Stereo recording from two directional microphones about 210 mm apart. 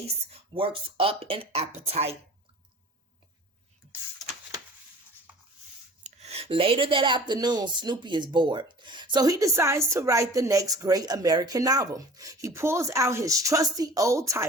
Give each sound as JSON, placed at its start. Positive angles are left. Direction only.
{"t": 0.3, "sound": "speech", "side_deg": -25}
{"t": 6.1, "sound": "speech", "side_deg": -30}